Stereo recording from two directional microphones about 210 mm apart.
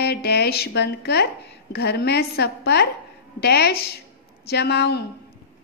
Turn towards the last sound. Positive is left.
turn(degrees=55)  # may be behind; listen again after turning